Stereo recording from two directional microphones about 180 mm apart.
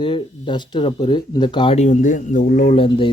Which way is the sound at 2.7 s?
30° left (ahead or behind).